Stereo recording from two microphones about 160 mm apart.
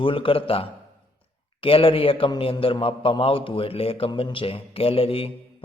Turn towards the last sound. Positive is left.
turn(degrees=35)  # may be behind; listen again after turning